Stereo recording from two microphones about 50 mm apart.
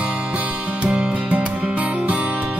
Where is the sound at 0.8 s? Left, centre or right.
Right.